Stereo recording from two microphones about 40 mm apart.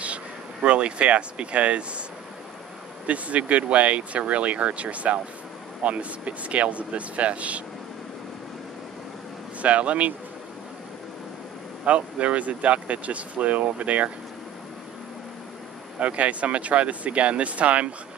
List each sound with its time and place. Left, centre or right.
0.0 s speech: right
3.1 s speech: right
9.6 s speech: right
11.8 s speech: right
16.0 s speech: right